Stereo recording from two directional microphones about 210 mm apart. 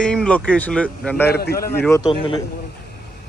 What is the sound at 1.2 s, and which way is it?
Speech, 50° left (ahead or behind).